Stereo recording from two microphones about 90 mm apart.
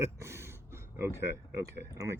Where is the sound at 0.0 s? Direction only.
30° right (ahead or behind).